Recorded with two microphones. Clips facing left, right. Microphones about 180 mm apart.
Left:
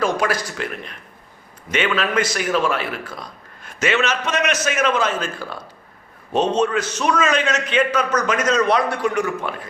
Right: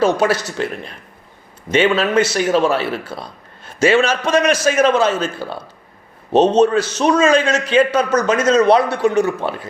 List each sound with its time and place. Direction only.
0.0 s a man's voice: 25° right (ahead or behind)